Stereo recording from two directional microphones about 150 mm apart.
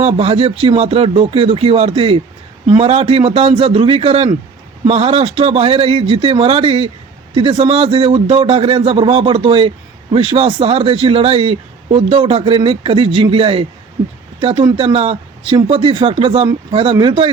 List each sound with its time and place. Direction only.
0.0 s a man's voice: 40° right (ahead or behind)